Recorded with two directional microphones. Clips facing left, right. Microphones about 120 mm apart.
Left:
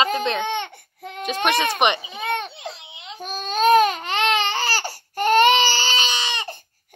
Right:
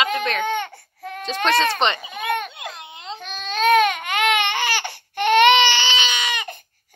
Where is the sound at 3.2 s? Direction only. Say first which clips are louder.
Left 2 dB; 40° left (ahead or behind).